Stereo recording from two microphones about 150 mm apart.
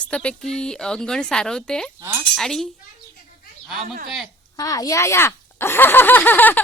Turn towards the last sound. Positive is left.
turn(degrees=10)  # may be behind; listen again after turning